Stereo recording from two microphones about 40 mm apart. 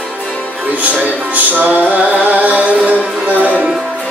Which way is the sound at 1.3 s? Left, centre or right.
Right.